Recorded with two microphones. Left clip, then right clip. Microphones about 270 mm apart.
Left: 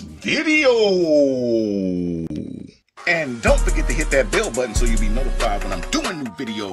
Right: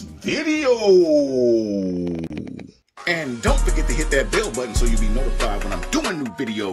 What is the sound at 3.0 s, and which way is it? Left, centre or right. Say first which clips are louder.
Speech: left 3 dB; centre.